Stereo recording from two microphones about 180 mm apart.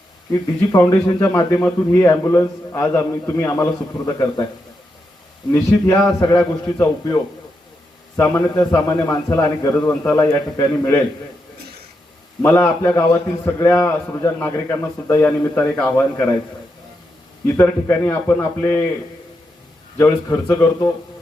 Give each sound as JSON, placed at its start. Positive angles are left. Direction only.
{"t": 0.7, "sound": "a man's voice", "side_deg": 20}
{"t": 5.5, "sound": "a man's voice", "side_deg": 15}
{"t": 8.1, "sound": "a man's voice", "side_deg": 15}
{"t": 12.4, "sound": "a man's voice", "side_deg": 10}
{"t": 17.4, "sound": "a man's voice", "side_deg": 10}
{"t": 20.0, "sound": "a man's voice", "side_deg": 15}